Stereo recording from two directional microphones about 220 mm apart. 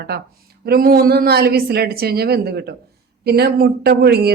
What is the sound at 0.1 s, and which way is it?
Speech, 45° right (ahead or behind).